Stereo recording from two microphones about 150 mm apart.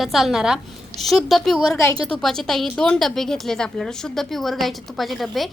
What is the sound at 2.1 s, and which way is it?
A woman's voice, 5° left (ahead or behind).